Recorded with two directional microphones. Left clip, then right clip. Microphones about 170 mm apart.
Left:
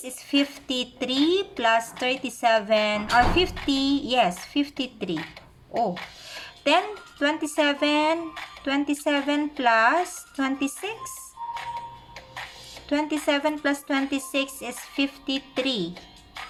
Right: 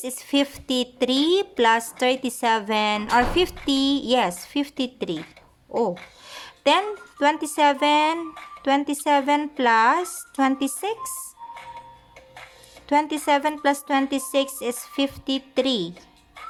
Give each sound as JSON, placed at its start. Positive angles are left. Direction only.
{"t": 0.0, "sound": "a woman's voice", "side_deg": -55}
{"t": 6.4, "sound": "a woman's voice", "side_deg": -50}
{"t": 12.9, "sound": "a woman's voice", "side_deg": -45}